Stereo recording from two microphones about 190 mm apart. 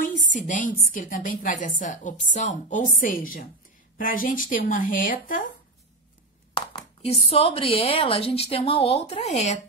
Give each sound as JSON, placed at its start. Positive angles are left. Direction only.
{"t": 0.0, "sound": "a woman's voice", "side_deg": 40}
{"t": 6.5, "sound": "a sound", "side_deg": 30}
{"t": 7.2, "sound": "a woman's voice", "side_deg": 30}